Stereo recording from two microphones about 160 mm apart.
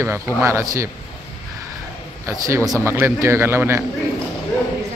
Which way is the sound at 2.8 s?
15° right (ahead or behind).